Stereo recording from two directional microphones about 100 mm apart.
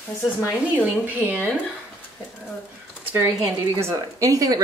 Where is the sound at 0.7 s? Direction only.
15° right (ahead or behind).